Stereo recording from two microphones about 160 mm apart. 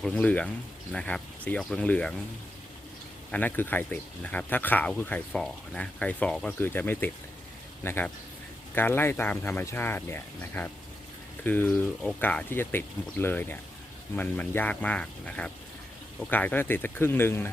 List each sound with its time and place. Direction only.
0.0 s speech: 10° left (ahead or behind)
3.3 s speech: 10° left (ahead or behind)